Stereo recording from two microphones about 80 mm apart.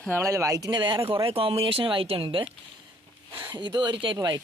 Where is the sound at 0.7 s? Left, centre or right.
Right.